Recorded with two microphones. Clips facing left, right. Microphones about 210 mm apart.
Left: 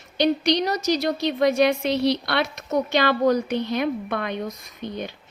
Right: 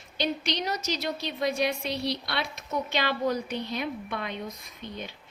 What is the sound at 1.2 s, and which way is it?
A woman's voice, 80° left.